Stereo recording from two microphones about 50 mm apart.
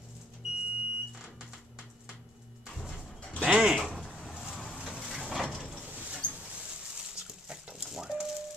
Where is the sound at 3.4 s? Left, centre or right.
Centre.